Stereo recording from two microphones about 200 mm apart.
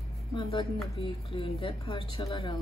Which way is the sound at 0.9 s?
30° left (ahead or behind).